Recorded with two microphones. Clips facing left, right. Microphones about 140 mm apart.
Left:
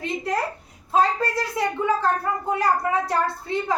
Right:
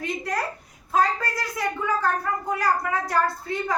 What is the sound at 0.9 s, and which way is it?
A woman's voice, 25° left (ahead or behind).